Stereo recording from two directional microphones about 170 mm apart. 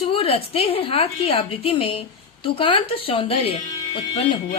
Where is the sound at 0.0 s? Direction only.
35° left (ahead or behind).